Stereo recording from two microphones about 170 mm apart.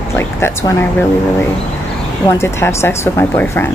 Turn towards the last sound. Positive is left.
turn(degrees=15)  # may be behind; listen again after turning